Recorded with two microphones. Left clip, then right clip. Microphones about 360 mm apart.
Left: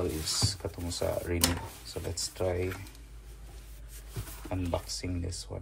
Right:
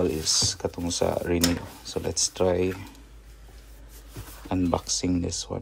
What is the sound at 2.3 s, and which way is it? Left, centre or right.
Speech, right.